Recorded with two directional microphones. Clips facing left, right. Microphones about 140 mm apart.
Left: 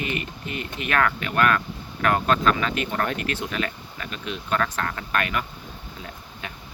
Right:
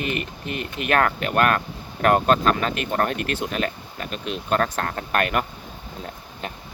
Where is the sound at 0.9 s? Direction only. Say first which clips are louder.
Right 3 dB; 50° right (ahead or behind).